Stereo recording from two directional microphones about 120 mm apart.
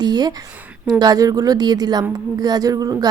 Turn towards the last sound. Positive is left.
turn(degrees=-30)  # may be behind; listen again after turning